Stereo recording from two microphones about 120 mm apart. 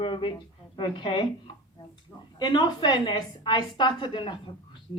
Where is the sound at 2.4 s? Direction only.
35° left (ahead or behind).